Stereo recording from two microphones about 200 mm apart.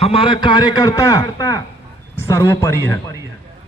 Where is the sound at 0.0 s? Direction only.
30° left (ahead or behind).